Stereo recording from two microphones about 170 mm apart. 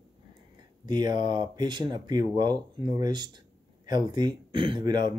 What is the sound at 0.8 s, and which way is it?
Speech, 25° right (ahead or behind).